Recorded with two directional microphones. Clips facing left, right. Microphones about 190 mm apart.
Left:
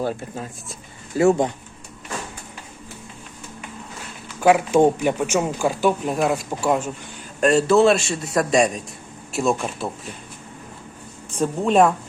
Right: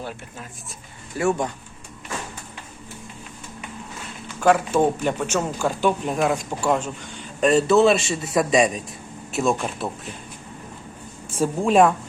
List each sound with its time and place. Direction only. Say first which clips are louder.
0.0 s speech: left 8 dB; 30° left (ahead or behind)
4.4 s a man's voice: left 3 dB; 10° left (ahead or behind)
11.3 s a man's voice: even; 5° right (ahead or behind)